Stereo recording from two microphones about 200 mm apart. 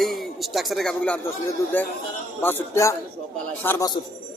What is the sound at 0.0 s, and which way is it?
Speech, centre (ahead or behind).